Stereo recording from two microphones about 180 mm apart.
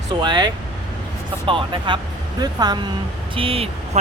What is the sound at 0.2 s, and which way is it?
Speech, 25° right (ahead or behind).